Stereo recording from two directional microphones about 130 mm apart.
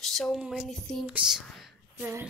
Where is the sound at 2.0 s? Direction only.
15° right (ahead or behind).